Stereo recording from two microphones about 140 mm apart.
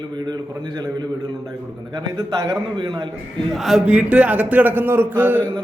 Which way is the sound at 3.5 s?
Centre (ahead or behind).